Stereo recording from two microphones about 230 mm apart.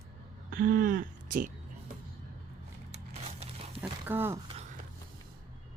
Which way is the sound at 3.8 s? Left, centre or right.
Centre.